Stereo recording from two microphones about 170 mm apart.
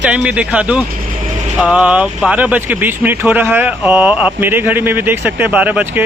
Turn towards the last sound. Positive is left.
turn(degrees=-10)  # may be behind; listen again after turning